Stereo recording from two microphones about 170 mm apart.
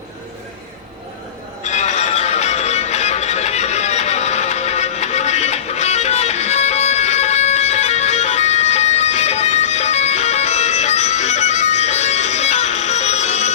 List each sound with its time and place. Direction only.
1.6 s music: 45° left (ahead or behind)